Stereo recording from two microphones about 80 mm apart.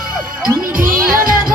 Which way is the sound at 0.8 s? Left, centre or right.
Right.